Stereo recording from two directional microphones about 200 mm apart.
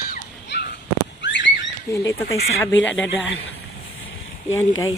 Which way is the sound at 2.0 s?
15° left (ahead or behind).